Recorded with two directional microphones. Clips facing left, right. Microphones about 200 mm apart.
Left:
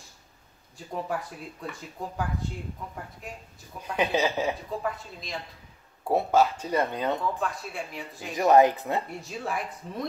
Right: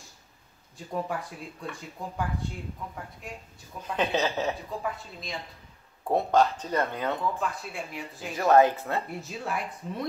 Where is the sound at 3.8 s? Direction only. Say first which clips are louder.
Left 1 dB; 10° left (ahead or behind).